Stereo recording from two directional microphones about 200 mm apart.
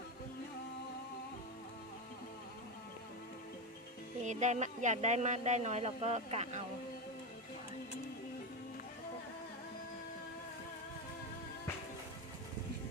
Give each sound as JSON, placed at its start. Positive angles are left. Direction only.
{"t": 4.2, "sound": "speech", "side_deg": -35}